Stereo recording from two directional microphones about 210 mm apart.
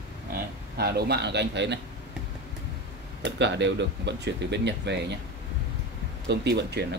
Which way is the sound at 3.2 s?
55° right (ahead or behind).